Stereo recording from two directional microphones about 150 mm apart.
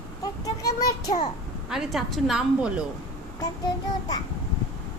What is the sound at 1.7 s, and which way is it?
A woman's voice, centre (ahead or behind).